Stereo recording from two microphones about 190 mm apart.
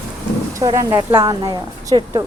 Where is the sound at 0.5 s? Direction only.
20° right (ahead or behind).